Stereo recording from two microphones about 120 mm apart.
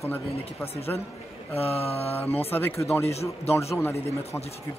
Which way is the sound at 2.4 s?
20° left (ahead or behind).